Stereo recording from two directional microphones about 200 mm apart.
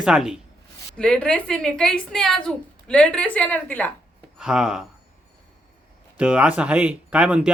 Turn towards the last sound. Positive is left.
turn(degrees=-5)  # may be behind; listen again after turning